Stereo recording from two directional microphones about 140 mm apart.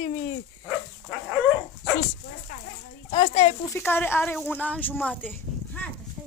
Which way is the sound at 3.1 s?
50° left (ahead or behind).